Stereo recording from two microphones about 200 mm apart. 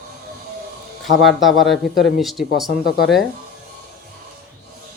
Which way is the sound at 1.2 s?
Centre (ahead or behind).